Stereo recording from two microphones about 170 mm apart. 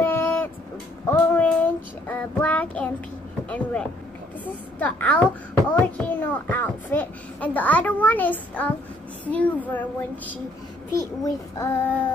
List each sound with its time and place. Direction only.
0.0 s vehicle: 10° left (ahead or behind)
1.0 s child singing: 10° left (ahead or behind)
3.4 s a child's voice: 10° left (ahead or behind)